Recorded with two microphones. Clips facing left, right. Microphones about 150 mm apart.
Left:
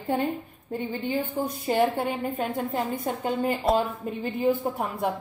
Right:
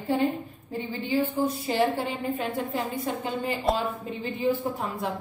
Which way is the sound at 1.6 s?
55° left (ahead or behind).